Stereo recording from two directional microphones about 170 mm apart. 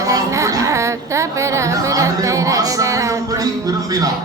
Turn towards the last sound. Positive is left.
turn(degrees=-20)  # may be behind; listen again after turning